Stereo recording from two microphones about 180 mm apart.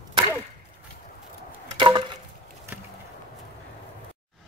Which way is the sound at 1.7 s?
25° right (ahead or behind).